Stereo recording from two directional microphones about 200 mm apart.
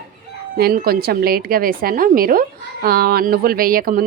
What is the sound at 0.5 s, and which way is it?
A woman's voice, 50° right (ahead or behind).